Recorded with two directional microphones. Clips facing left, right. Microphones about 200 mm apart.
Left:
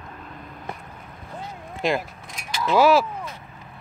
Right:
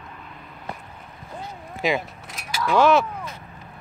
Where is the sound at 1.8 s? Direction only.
Centre (ahead or behind).